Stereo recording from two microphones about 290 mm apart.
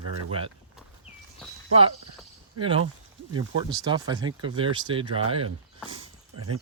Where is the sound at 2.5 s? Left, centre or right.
Centre.